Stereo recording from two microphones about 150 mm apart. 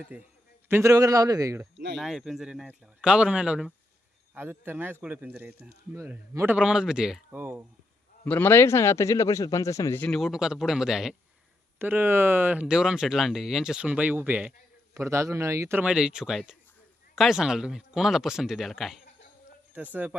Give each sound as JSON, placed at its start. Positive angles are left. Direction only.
{"t": 0.0, "sound": "a man's voice", "side_deg": -10}
{"t": 2.0, "sound": "speech", "side_deg": 0}
{"t": 8.2, "sound": "a man's voice", "side_deg": 15}
{"t": 10.0, "sound": "speech", "side_deg": 0}
{"t": 11.8, "sound": "speech", "side_deg": -15}